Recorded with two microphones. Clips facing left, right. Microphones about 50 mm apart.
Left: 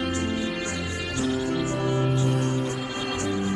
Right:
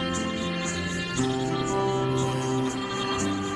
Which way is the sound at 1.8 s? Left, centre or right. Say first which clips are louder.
Left 1 dB; left.